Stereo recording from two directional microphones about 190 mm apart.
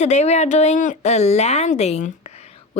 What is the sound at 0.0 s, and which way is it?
Speech, 35° left (ahead or behind).